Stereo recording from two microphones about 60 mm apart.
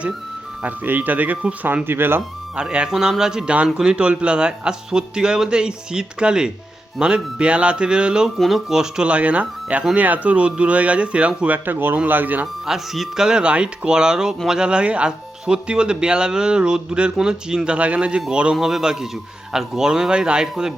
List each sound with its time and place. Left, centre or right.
0.6 s speech: right
1.6 s speech: right
2.6 s speech: centre
8.4 s speech: centre
11.5 s speech: right
12.6 s speech: centre
18.5 s speech: centre